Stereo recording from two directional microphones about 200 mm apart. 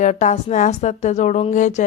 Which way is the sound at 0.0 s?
35° left (ahead or behind).